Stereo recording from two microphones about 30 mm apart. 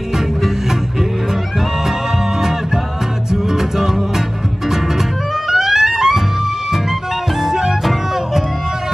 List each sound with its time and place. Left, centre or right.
3.3 s music: centre
5.5 s music: centre
7.4 s music: centre